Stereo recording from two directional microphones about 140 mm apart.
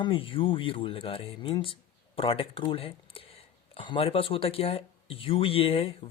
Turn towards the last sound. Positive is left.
turn(degrees=45)  # may be behind; listen again after turning